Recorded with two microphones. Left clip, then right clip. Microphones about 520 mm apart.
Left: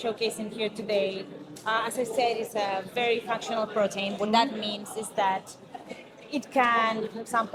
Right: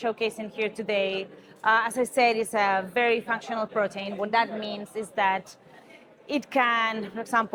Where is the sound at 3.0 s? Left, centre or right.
Right.